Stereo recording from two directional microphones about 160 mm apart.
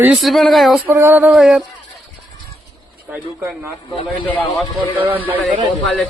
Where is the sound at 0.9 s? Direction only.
15° right (ahead or behind).